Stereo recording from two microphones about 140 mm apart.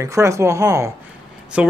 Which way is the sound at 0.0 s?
20° right (ahead or behind).